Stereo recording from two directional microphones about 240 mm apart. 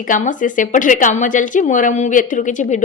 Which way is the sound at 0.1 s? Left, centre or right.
Left.